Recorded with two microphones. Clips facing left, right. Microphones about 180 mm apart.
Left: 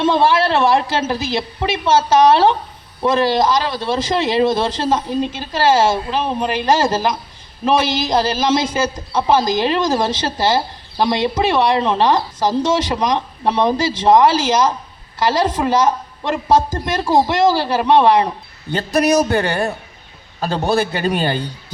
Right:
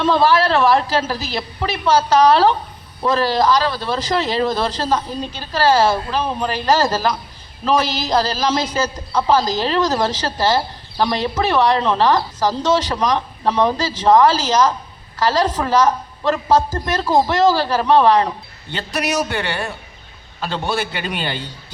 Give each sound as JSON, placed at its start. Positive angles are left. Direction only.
{"t": 0.0, "sound": "speech", "side_deg": 25}
{"t": 15.3, "sound": "speech", "side_deg": 25}
{"t": 18.7, "sound": "a man's voice", "side_deg": 40}